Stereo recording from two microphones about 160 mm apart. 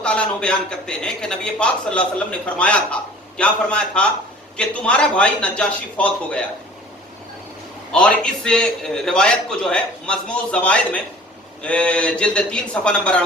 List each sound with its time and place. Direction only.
0.0 s a man's voice: 5° left (ahead or behind)
7.9 s a man's voice: 5° left (ahead or behind)